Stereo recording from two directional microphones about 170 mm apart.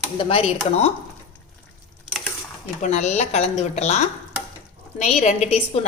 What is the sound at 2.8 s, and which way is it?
A woman's voice, 45° left (ahead or behind).